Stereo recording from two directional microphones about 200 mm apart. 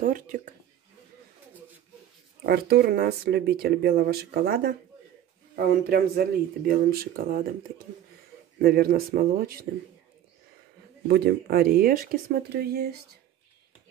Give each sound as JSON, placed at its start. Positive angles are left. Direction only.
{"t": 0.0, "sound": "speech", "side_deg": -40}
{"t": 2.4, "sound": "speech", "side_deg": -50}
{"t": 8.5, "sound": "speech", "side_deg": -50}
{"t": 11.1, "sound": "speech", "side_deg": -50}